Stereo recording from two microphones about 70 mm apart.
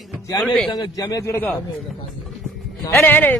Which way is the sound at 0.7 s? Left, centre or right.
Left.